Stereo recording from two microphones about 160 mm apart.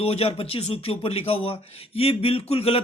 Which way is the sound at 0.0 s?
40° left (ahead or behind).